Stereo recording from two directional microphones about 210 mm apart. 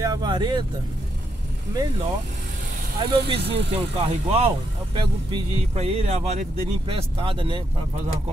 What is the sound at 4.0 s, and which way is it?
Speech, 30° right (ahead or behind).